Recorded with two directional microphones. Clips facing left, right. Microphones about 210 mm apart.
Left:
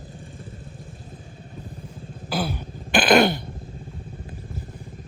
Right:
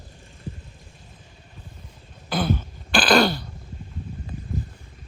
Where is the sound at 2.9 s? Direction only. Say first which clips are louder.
Left 2 dB; 20° left (ahead or behind).